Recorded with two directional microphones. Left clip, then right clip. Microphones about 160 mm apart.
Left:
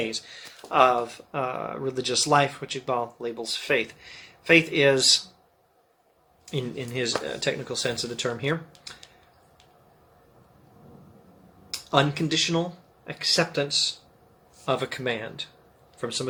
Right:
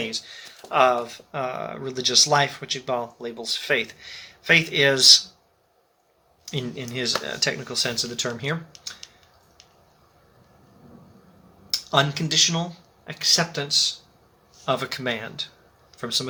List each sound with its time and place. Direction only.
0.1 s speech: 10° right (ahead or behind)
6.4 s speech: 10° right (ahead or behind)
11.7 s speech: 10° right (ahead or behind)